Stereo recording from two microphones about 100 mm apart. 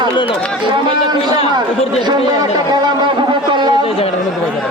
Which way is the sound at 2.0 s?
45° right (ahead or behind).